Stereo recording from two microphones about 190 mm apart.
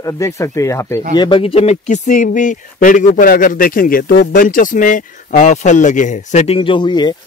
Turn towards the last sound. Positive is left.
turn(degrees=25)  # may be behind; listen again after turning